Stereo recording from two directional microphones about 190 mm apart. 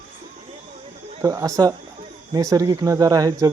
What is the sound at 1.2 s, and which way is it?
Speech, 15° right (ahead or behind).